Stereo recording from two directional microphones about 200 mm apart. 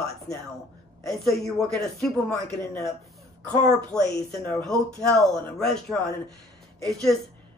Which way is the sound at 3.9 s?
5° left (ahead or behind).